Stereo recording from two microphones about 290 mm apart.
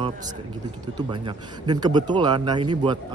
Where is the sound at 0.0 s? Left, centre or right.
Centre.